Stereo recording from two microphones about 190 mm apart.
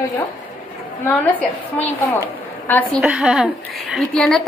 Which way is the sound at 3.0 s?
5° right (ahead or behind).